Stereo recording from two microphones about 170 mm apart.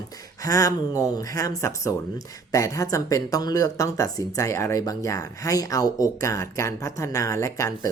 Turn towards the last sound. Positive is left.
turn(degrees=20)  # may be behind; listen again after turning